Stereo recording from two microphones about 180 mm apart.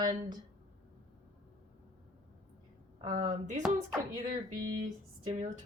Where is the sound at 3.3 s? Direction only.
45° right (ahead or behind).